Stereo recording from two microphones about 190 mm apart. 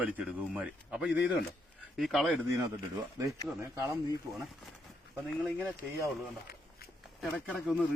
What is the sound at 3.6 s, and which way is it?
Speech, 15° right (ahead or behind).